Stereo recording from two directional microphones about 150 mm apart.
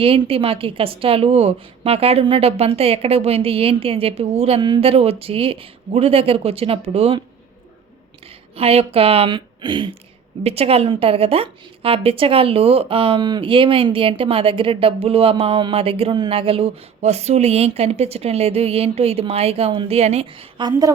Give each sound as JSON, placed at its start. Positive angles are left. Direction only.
{"t": 0.0, "sound": "a woman's voice", "side_deg": -40}
{"t": 8.5, "sound": "a woman's voice", "side_deg": -40}
{"t": 20.6, "sound": "a woman's voice", "side_deg": -25}